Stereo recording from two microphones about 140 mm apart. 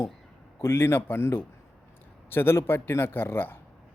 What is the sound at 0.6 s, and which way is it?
Speech, 15° left (ahead or behind).